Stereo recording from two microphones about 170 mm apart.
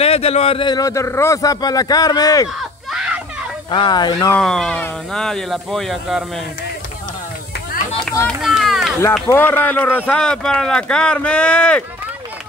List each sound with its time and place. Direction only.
0.0 s speech: 35° left (ahead or behind)
3.7 s speech: 25° left (ahead or behind)
4.3 s speech: 5° left (ahead or behind)
8.3 s speech: centre (ahead or behind)
9.3 s speech: 10° left (ahead or behind)